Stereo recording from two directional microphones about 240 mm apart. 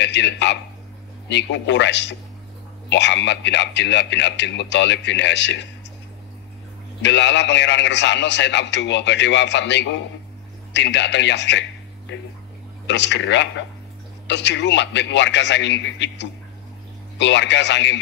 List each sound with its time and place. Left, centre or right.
0.0 s a man's voice: left
7.0 s a man's voice: left
12.8 s a man's voice: left